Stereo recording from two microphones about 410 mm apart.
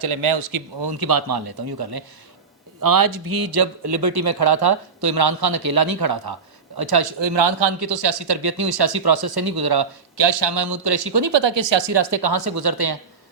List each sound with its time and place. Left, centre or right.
0.8 s speech: right